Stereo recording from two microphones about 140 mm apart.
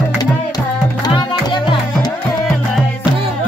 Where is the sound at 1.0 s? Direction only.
35° left (ahead or behind).